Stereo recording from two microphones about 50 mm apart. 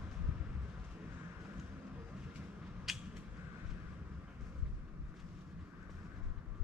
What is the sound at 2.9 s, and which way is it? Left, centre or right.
Creak, centre.